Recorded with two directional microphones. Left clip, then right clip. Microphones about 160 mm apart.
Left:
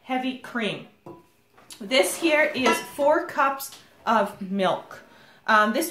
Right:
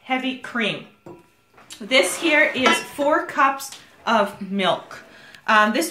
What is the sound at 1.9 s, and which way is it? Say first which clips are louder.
Speech: right 3 dB; 30° left (ahead or behind).